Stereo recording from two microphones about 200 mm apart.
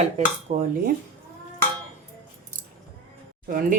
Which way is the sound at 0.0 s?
35° right (ahead or behind).